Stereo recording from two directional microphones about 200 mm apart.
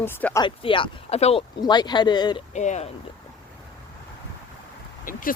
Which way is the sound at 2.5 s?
35° left (ahead or behind).